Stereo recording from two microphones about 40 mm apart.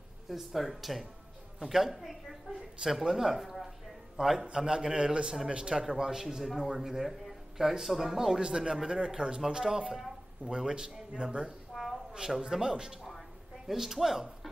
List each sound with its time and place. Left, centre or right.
0.3 s a man's voice: centre
4.5 s a man's voice: centre
11.7 s a sound: centre
12.4 s a man's voice: centre